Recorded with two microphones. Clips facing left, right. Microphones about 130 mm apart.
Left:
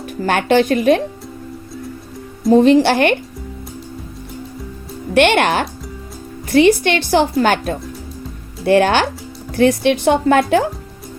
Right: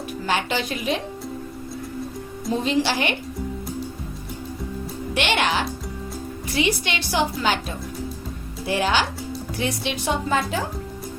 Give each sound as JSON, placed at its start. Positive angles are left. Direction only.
{"t": 0.0, "sound": "speech", "side_deg": 55}
{"t": 2.5, "sound": "a woman's voice", "side_deg": 55}
{"t": 5.1, "sound": "a woman's voice", "side_deg": 55}